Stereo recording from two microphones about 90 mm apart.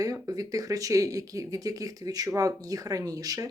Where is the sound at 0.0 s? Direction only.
40° right (ahead or behind).